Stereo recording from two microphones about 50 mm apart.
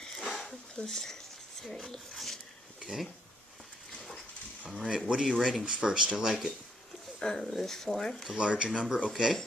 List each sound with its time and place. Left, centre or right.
0.0 s a sound: centre
0.8 s speech: centre
4.6 s speech: centre
5.7 s speech: centre
7.2 s speech: centre
8.4 s speech: centre
8.7 s speech: centre